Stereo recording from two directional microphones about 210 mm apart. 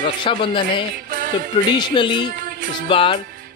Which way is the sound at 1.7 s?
20° left (ahead or behind).